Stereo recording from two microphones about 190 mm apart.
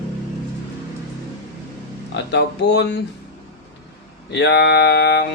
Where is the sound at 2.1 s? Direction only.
65° left (ahead or behind).